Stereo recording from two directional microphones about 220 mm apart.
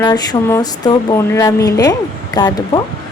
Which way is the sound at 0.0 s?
20° left (ahead or behind).